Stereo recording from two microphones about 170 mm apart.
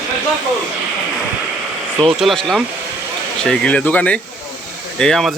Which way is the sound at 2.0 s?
Centre (ahead or behind).